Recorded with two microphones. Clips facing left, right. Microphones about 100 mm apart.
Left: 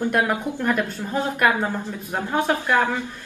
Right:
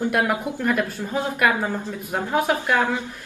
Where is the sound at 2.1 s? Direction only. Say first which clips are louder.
Right 1 dB; 10° right (ahead or behind).